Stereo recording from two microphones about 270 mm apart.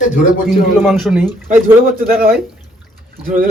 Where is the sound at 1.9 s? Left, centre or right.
Right.